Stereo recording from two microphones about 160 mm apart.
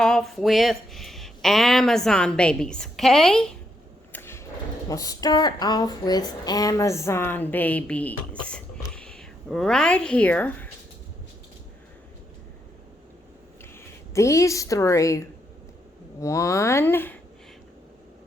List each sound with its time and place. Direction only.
0.0 s speech: 5° left (ahead or behind)
4.1 s a sound: 15° left (ahead or behind)
4.9 s speech: 20° left (ahead or behind)
14.1 s a woman's voice: 20° left (ahead or behind)